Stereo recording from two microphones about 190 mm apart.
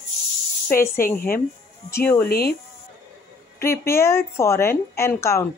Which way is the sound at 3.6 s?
15° left (ahead or behind).